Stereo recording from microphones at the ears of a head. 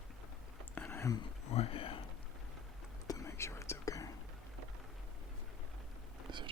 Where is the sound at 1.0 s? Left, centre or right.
Left.